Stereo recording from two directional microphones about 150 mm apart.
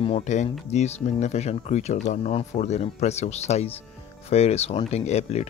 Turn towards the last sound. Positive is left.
turn(degrees=45)  # may be behind; listen again after turning